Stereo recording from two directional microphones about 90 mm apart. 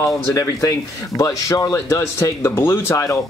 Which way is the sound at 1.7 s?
25° left (ahead or behind).